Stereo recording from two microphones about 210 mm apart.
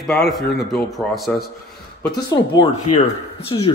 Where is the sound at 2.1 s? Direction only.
20° left (ahead or behind).